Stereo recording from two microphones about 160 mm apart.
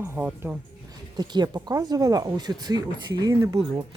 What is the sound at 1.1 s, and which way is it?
Speech, 25° right (ahead or behind).